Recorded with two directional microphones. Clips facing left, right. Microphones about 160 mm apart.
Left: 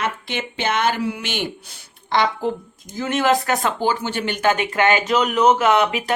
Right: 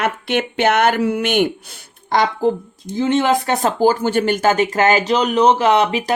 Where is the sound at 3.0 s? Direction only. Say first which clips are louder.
Right 3 dB; 25° right (ahead or behind).